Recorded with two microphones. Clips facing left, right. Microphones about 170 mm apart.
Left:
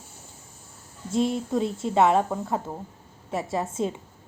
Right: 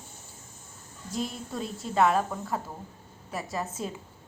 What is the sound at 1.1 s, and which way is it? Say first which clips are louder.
A woman's voice: left 9 dB; 25° left (ahead or behind).